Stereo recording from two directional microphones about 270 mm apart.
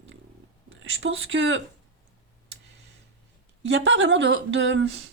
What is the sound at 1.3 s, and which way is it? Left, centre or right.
Speech, right.